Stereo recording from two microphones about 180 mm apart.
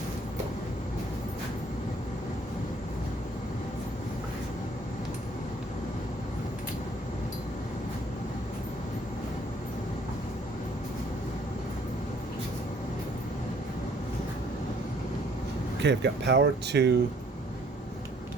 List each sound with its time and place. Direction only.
15.8 s speech: 75° right (ahead or behind)